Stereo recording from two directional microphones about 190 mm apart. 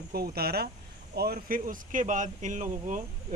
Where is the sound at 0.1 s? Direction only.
55° right (ahead or behind).